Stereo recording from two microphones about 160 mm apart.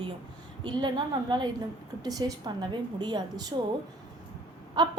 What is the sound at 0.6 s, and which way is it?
A woman's voice, 30° right (ahead or behind).